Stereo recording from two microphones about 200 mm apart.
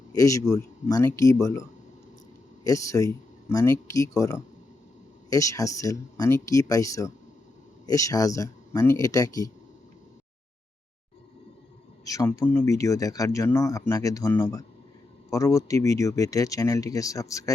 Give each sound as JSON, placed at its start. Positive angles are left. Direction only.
{"t": 0.1, "sound": "speech", "side_deg": 15}
{"t": 2.6, "sound": "speech", "side_deg": 15}
{"t": 12.0, "sound": "speech", "side_deg": 15}